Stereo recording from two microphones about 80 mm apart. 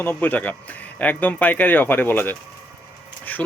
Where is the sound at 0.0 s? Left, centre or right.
Left.